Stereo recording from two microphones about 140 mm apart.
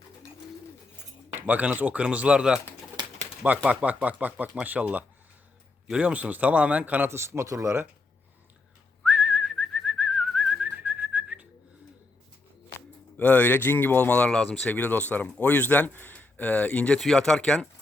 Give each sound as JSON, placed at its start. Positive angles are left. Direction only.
{"t": 1.4, "sound": "speech", "side_deg": -10}
{"t": 3.0, "sound": "pigeon", "side_deg": -30}
{"t": 3.7, "sound": "speech", "side_deg": -10}
{"t": 9.0, "sound": "whistling", "side_deg": -5}
{"t": 13.1, "sound": "speech", "side_deg": 10}